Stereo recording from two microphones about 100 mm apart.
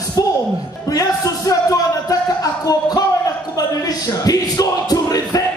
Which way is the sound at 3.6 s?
35° left (ahead or behind).